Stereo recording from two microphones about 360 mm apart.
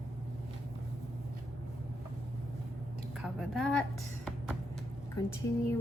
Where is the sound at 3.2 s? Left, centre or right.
Centre.